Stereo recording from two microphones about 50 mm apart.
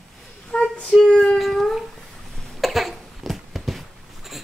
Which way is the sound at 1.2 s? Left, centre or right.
Centre.